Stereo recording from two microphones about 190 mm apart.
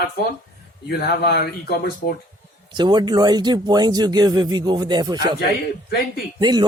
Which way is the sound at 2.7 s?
25° right (ahead or behind).